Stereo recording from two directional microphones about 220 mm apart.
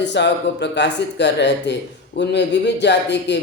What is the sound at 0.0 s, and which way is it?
A man's voice, 50° left (ahead or behind).